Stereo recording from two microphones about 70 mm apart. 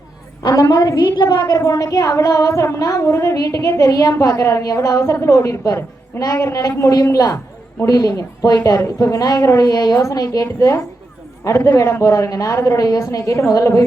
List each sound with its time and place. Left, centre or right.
0.4 s a woman's voice: left
9.9 s a woman's voice: left